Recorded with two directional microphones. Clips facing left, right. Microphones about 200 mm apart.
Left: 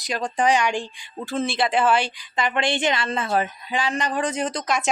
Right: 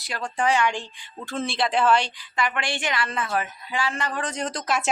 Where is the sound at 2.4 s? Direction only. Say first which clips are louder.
Left 4 dB; 25° left (ahead or behind).